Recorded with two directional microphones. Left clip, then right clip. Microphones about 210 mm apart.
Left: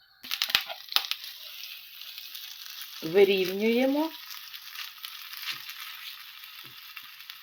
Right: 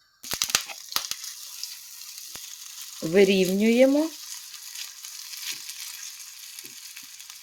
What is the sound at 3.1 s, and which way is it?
Speech, 40° right (ahead or behind).